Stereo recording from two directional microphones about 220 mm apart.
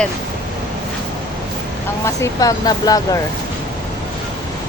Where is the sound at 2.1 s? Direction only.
15° left (ahead or behind).